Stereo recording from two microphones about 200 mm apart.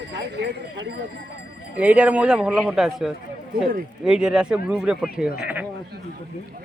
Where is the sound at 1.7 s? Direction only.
5° right (ahead or behind).